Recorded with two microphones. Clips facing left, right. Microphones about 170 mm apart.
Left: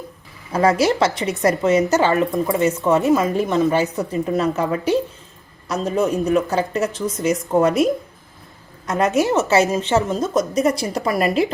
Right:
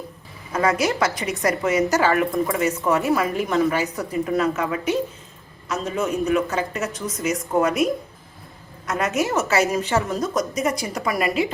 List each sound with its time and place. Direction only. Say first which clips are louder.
0.5 s a woman's voice: left 4 dB; 35° left (ahead or behind)
8.9 s a woman's voice: left 5 dB; 30° left (ahead or behind)